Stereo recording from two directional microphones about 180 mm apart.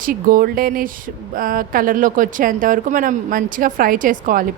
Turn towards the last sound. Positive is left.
turn(degrees=-50)  # may be behind; listen again after turning